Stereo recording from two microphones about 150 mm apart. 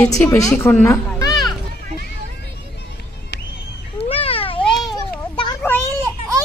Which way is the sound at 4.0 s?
40° left (ahead or behind).